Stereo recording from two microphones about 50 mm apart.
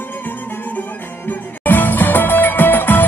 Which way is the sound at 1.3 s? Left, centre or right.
Left.